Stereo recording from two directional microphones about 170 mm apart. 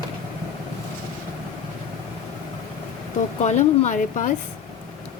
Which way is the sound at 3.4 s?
45° left (ahead or behind).